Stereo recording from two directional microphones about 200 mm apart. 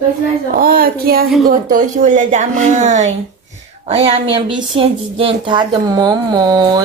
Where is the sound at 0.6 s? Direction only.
50° right (ahead or behind).